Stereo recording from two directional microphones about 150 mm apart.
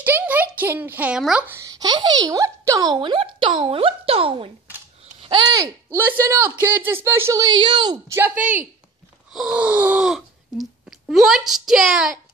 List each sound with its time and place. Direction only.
0.0 s a child's voice: 10° right (ahead or behind)
1.6 s a child's voice: 25° right (ahead or behind)
5.9 s a woman's voice: 15° right (ahead or behind)
8.1 s speech: 10° right (ahead or behind)